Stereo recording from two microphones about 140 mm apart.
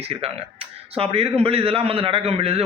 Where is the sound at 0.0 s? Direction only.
45° right (ahead or behind).